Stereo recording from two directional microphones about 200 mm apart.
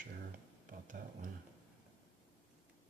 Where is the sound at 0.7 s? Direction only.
40° right (ahead or behind).